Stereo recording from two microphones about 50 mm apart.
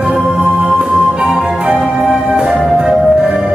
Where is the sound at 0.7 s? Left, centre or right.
Centre.